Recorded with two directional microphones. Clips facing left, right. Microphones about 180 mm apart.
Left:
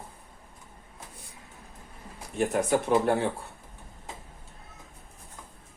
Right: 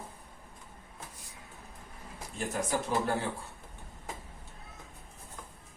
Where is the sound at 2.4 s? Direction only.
60° left (ahead or behind).